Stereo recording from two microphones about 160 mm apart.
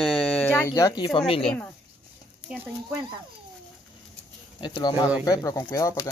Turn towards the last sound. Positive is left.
turn(degrees=20)  # may be behind; listen again after turning